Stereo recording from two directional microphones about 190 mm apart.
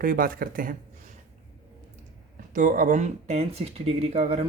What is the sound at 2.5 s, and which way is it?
Speech, 45° right (ahead or behind).